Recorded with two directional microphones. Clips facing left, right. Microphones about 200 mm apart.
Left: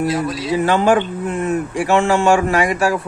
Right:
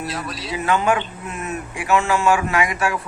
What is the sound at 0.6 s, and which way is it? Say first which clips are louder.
Speech: left 5 dB; 30° left (ahead or behind).